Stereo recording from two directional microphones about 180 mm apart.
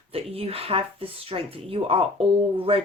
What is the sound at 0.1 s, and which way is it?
Speech, 30° right (ahead or behind).